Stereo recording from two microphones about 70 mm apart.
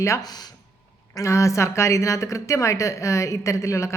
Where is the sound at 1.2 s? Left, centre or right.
Left.